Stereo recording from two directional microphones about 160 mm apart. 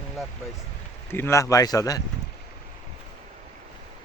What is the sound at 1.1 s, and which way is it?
Speech, 15° left (ahead or behind).